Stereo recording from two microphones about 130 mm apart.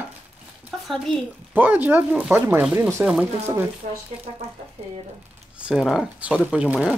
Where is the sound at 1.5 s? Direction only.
15° right (ahead or behind).